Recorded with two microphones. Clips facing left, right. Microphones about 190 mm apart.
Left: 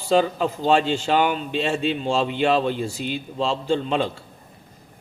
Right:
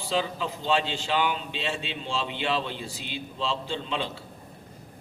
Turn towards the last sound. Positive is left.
turn(degrees=45)  # may be behind; listen again after turning